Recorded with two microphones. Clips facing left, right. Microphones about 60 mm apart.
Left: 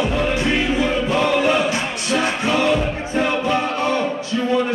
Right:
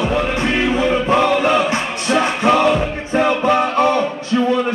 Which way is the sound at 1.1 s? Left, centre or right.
Right.